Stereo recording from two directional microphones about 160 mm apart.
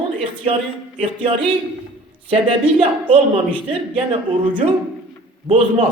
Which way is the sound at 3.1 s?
30° right (ahead or behind).